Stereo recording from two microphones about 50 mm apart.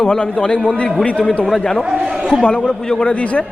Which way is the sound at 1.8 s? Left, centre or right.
Centre.